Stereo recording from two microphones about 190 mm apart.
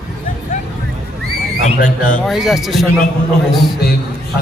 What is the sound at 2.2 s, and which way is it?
Speech, centre (ahead or behind).